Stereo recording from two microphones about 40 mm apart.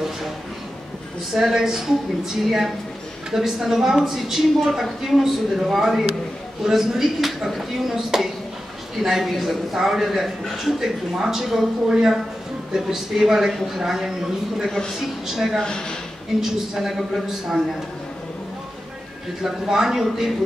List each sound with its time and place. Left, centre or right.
1.3 s speech: centre
11.9 s speech: centre
15.6 s speech: centre
16.3 s speech: centre
19.7 s speech: centre